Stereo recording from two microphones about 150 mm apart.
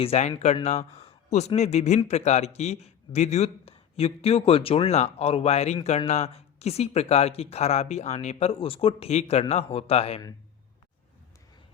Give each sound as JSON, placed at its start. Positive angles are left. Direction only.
{"t": 0.0, "sound": "speech", "side_deg": 45}